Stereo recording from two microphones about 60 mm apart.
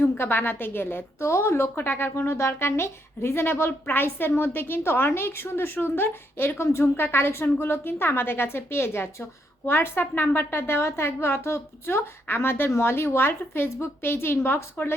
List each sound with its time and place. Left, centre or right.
0.2 s a woman's voice: left